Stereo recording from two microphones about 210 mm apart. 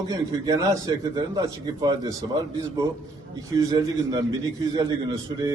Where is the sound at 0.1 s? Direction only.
15° right (ahead or behind).